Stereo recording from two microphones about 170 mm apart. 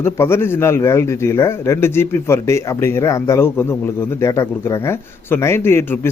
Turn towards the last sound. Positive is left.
turn(degrees=15)  # may be behind; listen again after turning